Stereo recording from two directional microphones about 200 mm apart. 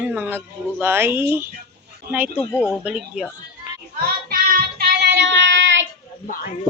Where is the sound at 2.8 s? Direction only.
5° right (ahead or behind).